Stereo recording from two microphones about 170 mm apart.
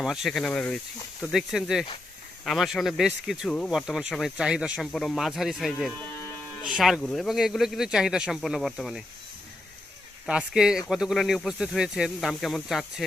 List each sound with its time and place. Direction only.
0.0 s speech: centre (ahead or behind)
10.2 s speech: 5° right (ahead or behind)